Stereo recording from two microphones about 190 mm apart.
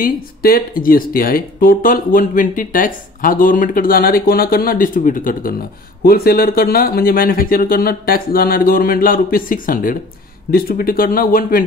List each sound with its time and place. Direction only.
0.0 s speech: 50° left (ahead or behind)